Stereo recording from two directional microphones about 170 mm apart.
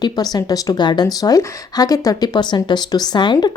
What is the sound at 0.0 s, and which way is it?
Speech, 25° left (ahead or behind).